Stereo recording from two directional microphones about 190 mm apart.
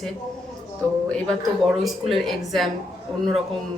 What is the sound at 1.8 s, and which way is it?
Speech, centre (ahead or behind).